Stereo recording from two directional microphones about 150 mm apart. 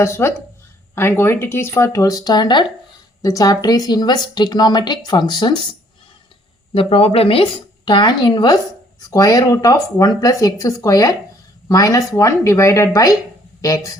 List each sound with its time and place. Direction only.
0.0 s a woman's voice: 15° left (ahead or behind)
6.7 s a woman's voice: 40° left (ahead or behind); by 14.0 s 20° left (ahead or behind)